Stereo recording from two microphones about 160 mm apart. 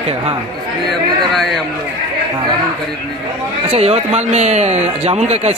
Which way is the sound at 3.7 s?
40° right (ahead or behind).